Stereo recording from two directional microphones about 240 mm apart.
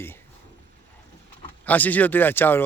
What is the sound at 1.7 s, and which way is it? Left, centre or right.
Speech, centre.